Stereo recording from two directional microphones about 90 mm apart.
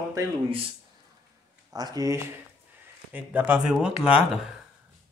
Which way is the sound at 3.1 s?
20° right (ahead or behind).